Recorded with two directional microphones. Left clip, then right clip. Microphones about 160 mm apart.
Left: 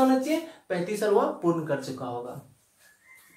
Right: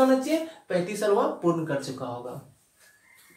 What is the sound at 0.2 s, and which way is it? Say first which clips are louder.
Speech: right 1 dB; 20° left (ahead or behind).